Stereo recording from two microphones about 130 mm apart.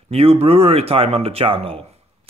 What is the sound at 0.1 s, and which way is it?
Speech, 50° right (ahead or behind).